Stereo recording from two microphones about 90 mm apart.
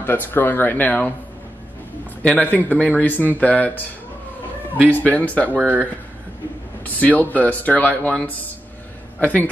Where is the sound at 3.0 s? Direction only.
20° left (ahead or behind).